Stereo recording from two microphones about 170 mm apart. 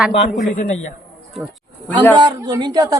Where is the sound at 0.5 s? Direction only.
45° left (ahead or behind).